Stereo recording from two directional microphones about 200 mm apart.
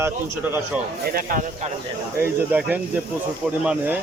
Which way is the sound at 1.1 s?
45° right (ahead or behind).